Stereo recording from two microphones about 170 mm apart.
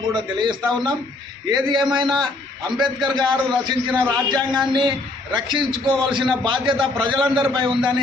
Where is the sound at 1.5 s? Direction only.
25° right (ahead or behind).